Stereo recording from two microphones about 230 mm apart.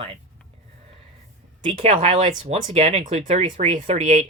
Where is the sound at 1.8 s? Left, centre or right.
Right.